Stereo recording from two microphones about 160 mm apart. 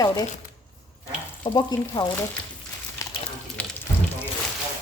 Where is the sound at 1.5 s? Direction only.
25° left (ahead or behind).